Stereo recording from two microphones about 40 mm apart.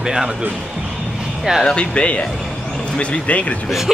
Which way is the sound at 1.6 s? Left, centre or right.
Left.